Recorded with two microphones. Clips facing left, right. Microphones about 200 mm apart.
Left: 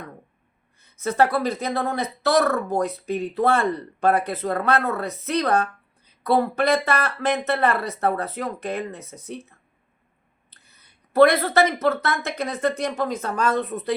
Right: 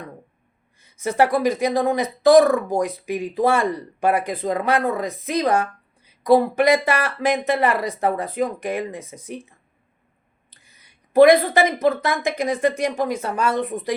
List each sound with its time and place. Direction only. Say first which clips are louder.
0.9 s speech: right 2 dB; 10° right (ahead or behind)
10.5 s a sound: right 2 dB; 65° left (ahead or behind)
10.8 s speech: right 3 dB; 15° right (ahead or behind)